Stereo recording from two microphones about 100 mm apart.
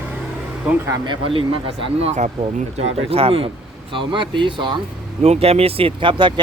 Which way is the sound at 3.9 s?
55° right (ahead or behind).